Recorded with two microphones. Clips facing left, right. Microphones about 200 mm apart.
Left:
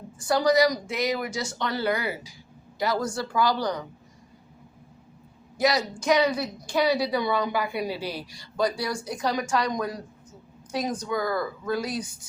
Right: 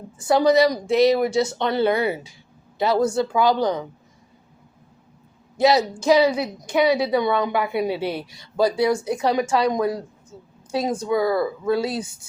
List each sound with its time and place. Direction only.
0.2 s a woman's voice: 25° right (ahead or behind)
5.5 s a woman's voice: 25° right (ahead or behind)
11.1 s speech: 5° right (ahead or behind)
11.3 s a woman's voice: 25° right (ahead or behind)